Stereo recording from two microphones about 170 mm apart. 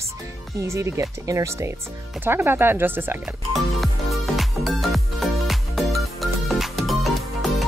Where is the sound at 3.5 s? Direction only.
Centre (ahead or behind).